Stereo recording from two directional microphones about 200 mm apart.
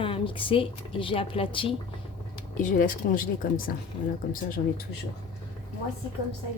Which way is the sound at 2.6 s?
40° left (ahead or behind).